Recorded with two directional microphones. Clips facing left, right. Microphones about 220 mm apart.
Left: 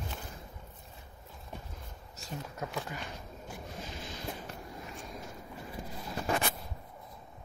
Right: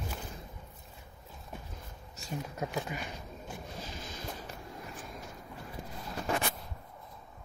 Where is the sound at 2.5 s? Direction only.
15° right (ahead or behind).